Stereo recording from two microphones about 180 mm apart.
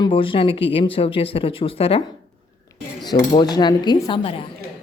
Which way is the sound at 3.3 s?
25° left (ahead or behind).